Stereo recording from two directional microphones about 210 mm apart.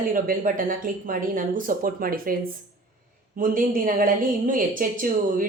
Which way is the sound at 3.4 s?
40° right (ahead or behind).